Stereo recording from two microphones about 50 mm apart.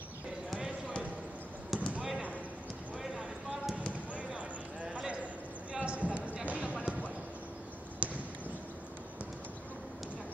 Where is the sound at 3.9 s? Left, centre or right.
Right.